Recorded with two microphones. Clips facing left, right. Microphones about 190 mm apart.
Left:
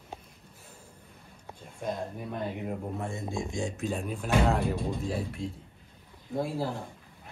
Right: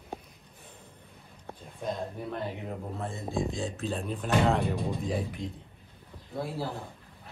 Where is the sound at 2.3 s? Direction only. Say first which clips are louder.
Left 1 dB; 10° left (ahead or behind).